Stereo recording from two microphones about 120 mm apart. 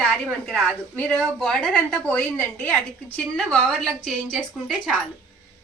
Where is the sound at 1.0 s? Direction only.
10° left (ahead or behind).